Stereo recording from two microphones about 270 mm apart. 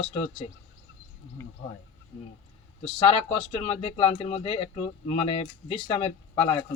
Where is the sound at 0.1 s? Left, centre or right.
Left.